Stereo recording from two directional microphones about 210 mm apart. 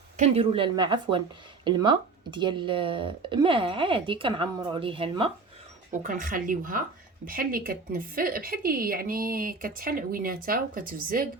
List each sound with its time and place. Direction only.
0.2 s speech: 25° right (ahead or behind)
5.9 s a woman's voice: 35° right (ahead or behind)